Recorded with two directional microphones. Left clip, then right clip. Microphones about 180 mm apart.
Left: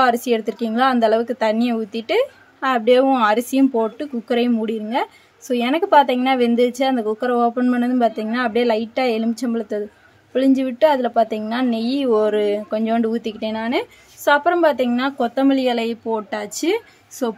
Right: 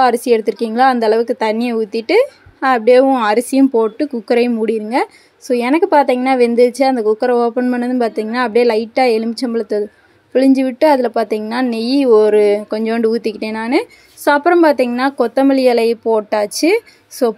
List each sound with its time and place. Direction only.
0.0 s speech: 20° right (ahead or behind)